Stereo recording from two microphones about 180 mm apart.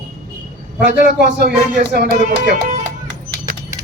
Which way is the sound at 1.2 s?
60° right (ahead or behind).